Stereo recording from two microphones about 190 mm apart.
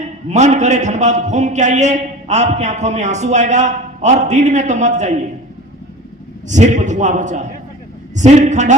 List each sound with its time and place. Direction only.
0.0 s a man's voice: 35° right (ahead or behind)
6.5 s a man's voice: 40° right (ahead or behind)